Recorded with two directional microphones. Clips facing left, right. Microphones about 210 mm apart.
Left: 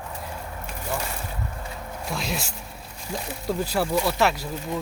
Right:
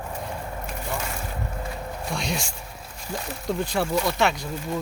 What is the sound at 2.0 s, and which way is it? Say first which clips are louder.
Speech: even; centre (ahead or behind).